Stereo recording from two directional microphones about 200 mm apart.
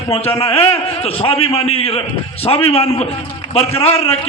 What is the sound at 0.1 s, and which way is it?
A man's voice, 30° left (ahead or behind).